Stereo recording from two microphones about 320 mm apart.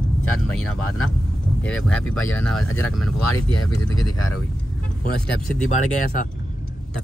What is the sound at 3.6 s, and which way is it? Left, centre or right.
Speech, left.